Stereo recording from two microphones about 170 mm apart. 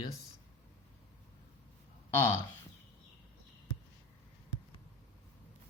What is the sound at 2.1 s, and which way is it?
Speech, 15° left (ahead or behind).